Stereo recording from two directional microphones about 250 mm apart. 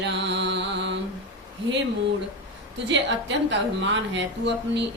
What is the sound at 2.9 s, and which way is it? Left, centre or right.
A woman's voice, right.